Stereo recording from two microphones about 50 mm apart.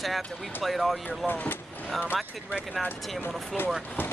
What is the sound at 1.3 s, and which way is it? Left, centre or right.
Speech, left.